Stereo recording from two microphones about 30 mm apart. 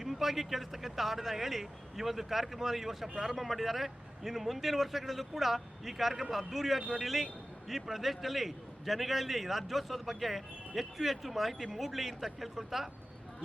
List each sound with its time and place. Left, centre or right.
0.0 s a man's voice: centre